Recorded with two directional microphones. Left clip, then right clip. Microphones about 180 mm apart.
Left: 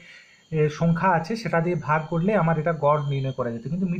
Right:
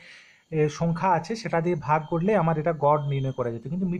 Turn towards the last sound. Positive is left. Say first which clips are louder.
# left 1 dB
turn(degrees=-45)  # may be behind; listen again after turning